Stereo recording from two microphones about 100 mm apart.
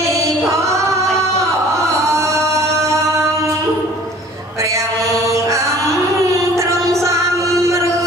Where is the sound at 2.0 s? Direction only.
30° right (ahead or behind).